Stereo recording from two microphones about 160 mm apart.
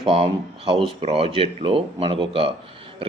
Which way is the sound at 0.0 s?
35° right (ahead or behind).